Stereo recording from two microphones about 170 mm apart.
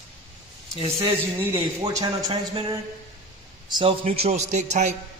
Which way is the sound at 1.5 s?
25° right (ahead or behind).